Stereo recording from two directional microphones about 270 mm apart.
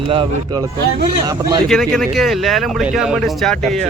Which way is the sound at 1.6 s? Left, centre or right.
Centre.